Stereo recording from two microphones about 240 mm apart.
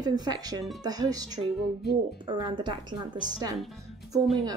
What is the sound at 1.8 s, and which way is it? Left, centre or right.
Speech, left.